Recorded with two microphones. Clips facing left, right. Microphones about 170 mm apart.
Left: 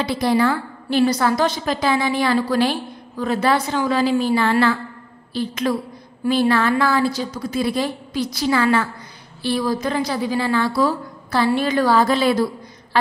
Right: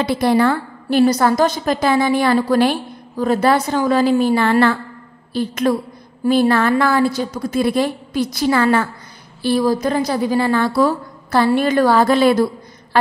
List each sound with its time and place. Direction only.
0.0 s a woman's voice: 55° right (ahead or behind)